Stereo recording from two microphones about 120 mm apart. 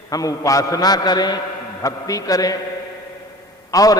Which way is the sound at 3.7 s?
30° left (ahead or behind).